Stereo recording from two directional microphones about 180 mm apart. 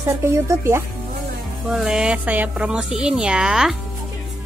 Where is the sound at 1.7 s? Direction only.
Centre (ahead or behind).